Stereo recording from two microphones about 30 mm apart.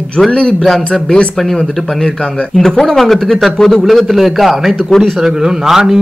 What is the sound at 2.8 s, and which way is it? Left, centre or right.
Speech, centre.